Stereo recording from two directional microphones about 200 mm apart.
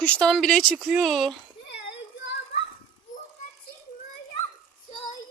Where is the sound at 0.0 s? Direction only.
5° left (ahead or behind).